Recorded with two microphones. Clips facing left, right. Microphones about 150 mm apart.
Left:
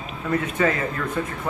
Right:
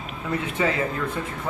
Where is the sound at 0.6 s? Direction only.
20° right (ahead or behind).